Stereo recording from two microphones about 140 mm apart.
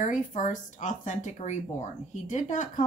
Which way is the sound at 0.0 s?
65° left (ahead or behind).